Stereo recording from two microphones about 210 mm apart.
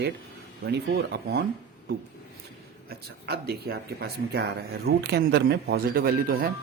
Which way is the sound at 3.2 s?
50° right (ahead or behind).